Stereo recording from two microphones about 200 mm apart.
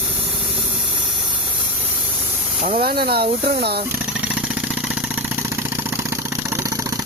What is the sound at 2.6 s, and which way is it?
Speech, 40° right (ahead or behind).